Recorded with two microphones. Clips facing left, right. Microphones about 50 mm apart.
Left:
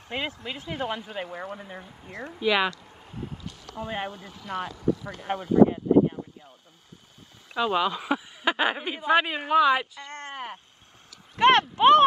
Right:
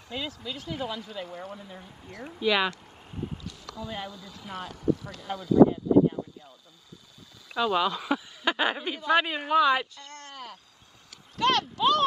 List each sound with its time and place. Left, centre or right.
0.1 s speech: left
2.3 s a woman's voice: centre
3.4 s speech: left
6.2 s a sound: left
7.5 s a woman's voice: centre
10.0 s a sound: left